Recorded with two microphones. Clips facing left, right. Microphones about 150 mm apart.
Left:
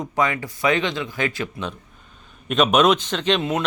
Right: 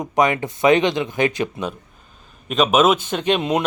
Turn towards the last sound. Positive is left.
turn(degrees=-15)  # may be behind; listen again after turning